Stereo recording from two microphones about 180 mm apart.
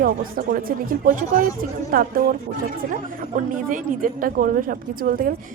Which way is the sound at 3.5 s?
50° right (ahead or behind).